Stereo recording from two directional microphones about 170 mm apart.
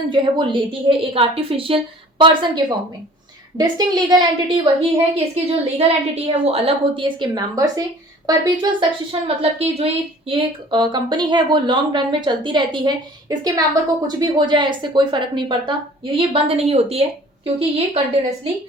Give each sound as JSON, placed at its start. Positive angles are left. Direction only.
{"t": 0.1, "sound": "a woman's voice", "side_deg": -30}
{"t": 3.6, "sound": "a woman's voice", "side_deg": -25}